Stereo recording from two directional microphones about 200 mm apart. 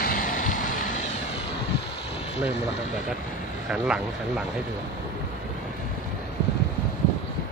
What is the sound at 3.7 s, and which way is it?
Speech, 5° right (ahead or behind).